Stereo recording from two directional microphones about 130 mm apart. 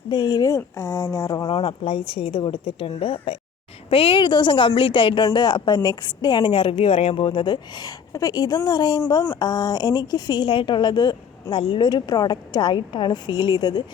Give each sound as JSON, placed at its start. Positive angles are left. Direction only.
{"t": 0.1, "sound": "speech", "side_deg": 30}
{"t": 1.5, "sound": "speech", "side_deg": 45}